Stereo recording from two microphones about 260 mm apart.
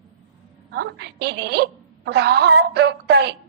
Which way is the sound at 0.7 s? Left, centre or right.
Right.